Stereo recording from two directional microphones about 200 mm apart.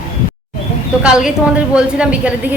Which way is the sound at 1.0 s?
5° right (ahead or behind).